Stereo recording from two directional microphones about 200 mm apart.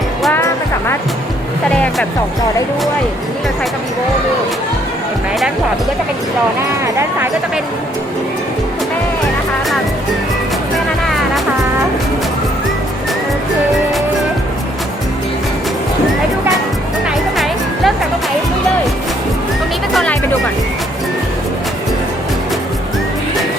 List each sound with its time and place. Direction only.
1.7 s music: 5° left (ahead or behind)
6.8 s speech: 15° right (ahead or behind)
17.3 s music: centre (ahead or behind)
19.9 s music: centre (ahead or behind)